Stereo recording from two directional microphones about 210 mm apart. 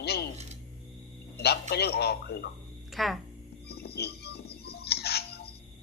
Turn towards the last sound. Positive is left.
turn(degrees=50)  # may be behind; listen again after turning